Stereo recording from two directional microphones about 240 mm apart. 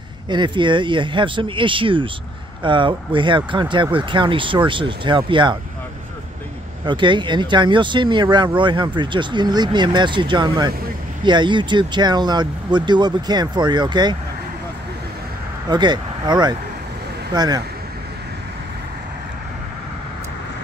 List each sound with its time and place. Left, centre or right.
0.3 s speech: centre
6.9 s speech: centre
15.7 s speech: centre